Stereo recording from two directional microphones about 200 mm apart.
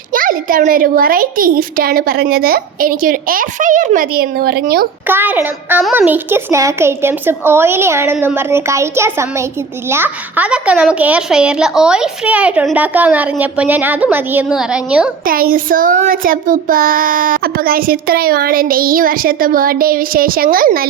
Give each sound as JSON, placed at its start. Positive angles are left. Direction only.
{"t": 0.1, "sound": "child singing", "side_deg": -45}
{"t": 5.0, "sound": "a woman's voice", "side_deg": -10}
{"t": 15.2, "sound": "child singing", "side_deg": -45}